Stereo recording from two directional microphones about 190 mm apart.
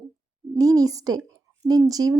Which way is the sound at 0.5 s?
20° right (ahead or behind).